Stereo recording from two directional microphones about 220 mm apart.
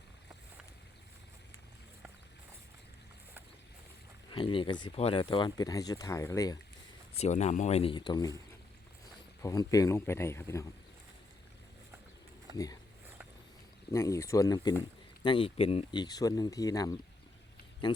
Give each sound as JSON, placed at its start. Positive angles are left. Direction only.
{"t": 4.3, "sound": "speech", "side_deg": 20}
{"t": 7.2, "sound": "speech", "side_deg": 30}
{"t": 9.4, "sound": "speech", "side_deg": 15}
{"t": 13.9, "sound": "speech", "side_deg": 10}